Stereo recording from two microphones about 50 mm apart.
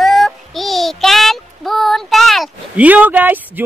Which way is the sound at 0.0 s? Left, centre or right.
Centre.